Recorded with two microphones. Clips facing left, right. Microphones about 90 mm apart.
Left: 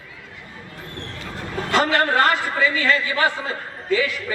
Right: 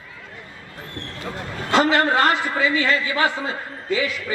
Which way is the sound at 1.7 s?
20° right (ahead or behind).